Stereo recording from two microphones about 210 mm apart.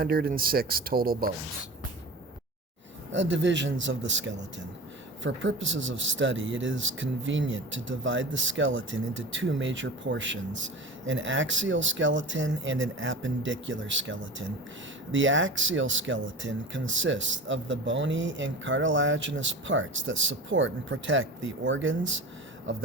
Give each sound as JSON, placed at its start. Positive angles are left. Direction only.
{"t": 0.0, "sound": "speech", "side_deg": -45}
{"t": 3.1, "sound": "speech", "side_deg": -60}